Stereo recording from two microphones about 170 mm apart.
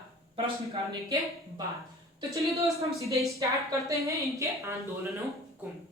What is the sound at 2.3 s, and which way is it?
Speech, 20° right (ahead or behind).